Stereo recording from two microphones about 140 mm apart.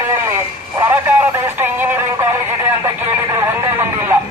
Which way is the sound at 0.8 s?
15° right (ahead or behind).